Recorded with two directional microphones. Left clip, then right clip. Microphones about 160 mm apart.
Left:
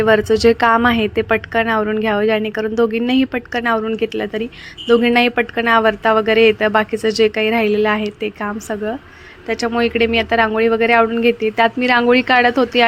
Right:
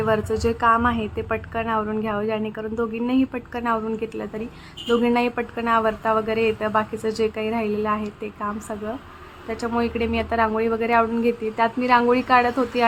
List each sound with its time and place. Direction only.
0.0 s a woman's voice: 30° left (ahead or behind)